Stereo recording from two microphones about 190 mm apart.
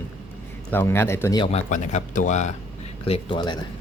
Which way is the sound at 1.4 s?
35° left (ahead or behind).